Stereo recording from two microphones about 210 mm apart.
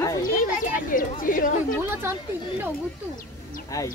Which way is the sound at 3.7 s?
15° left (ahead or behind).